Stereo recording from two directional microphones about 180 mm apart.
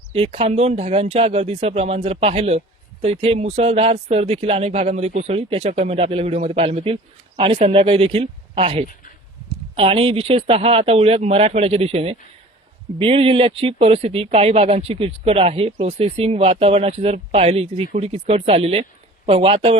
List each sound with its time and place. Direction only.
0.1 s speech: 35° right (ahead or behind)